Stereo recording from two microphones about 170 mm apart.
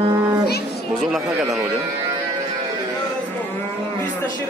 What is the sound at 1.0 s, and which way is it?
Speech, centre (ahead or behind).